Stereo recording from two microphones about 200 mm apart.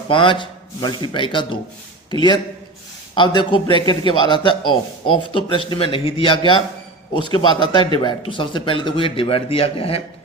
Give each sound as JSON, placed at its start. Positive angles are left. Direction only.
{"t": 0.1, "sound": "speech", "side_deg": 25}